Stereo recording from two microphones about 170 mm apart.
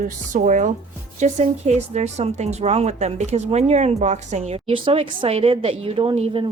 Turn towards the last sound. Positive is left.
turn(degrees=-35)  # may be behind; listen again after turning